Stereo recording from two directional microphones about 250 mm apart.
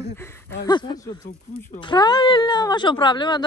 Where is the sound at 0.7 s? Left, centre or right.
Centre.